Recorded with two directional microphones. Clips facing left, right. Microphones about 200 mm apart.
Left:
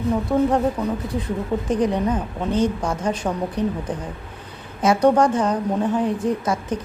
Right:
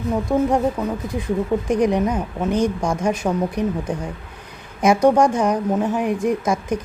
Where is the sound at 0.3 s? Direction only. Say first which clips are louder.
Right 1 dB; 10° right (ahead or behind).